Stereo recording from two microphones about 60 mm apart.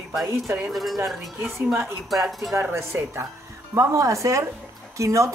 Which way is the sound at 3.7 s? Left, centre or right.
Right.